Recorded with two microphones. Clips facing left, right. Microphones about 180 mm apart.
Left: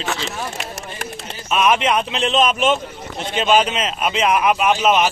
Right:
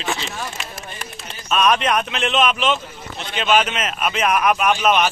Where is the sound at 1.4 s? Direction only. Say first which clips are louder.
Left 1 dB; 20° left (ahead or behind).